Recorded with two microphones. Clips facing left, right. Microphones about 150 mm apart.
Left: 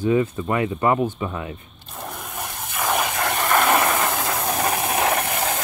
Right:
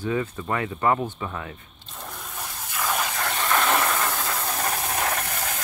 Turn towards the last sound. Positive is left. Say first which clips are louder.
# left 7 dB
turn(degrees=80)